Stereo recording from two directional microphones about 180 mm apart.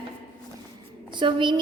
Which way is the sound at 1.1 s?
25° right (ahead or behind).